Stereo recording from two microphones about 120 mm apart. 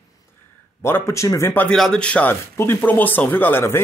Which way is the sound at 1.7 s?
5° left (ahead or behind).